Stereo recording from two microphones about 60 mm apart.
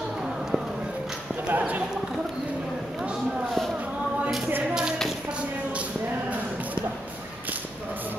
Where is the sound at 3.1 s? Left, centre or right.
Centre.